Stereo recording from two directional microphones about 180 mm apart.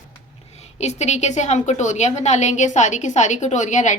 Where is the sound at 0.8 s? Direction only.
40° left (ahead or behind).